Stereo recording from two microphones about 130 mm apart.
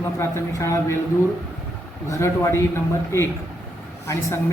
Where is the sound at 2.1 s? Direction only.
25° left (ahead or behind).